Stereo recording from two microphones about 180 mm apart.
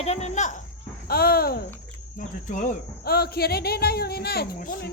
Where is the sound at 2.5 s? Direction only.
45° left (ahead or behind).